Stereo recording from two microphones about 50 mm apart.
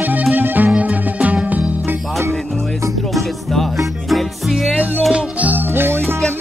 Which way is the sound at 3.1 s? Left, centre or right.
Centre.